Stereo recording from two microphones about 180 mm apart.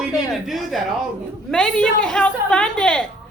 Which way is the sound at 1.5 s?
5° left (ahead or behind).